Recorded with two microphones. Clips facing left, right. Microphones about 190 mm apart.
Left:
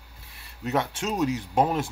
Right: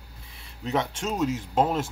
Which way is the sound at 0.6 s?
5° left (ahead or behind).